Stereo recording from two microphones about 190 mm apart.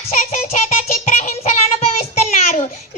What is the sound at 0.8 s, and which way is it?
Child singing, 40° left (ahead or behind).